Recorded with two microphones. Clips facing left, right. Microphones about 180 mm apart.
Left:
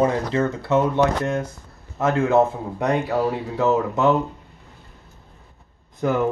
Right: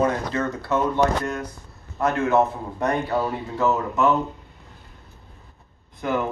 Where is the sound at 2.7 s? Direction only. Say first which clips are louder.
Left 2 dB; 15° left (ahead or behind).